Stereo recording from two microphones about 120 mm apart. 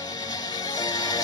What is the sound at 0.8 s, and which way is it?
Music, 30° left (ahead or behind).